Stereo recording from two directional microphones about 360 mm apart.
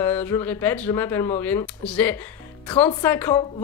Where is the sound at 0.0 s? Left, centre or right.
Centre.